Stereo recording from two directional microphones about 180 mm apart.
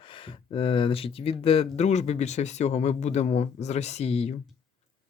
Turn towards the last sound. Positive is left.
turn(degrees=35)  # may be behind; listen again after turning